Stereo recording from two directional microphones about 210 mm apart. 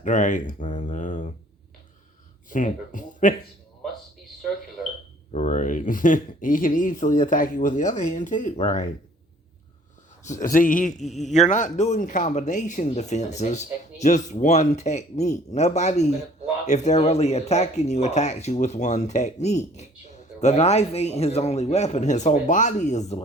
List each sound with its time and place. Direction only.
0.0 s speech: 35° left (ahead or behind)
2.5 s speech: 40° left (ahead or behind)
5.3 s speech: 35° left (ahead or behind)
10.2 s speech: 35° left (ahead or behind)